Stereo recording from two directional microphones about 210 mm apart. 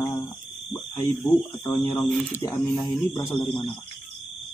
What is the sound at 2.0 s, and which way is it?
Speech, 5° left (ahead or behind).